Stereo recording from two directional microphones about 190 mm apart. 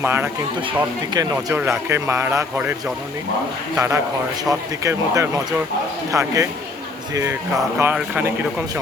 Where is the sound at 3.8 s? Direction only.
15° right (ahead or behind).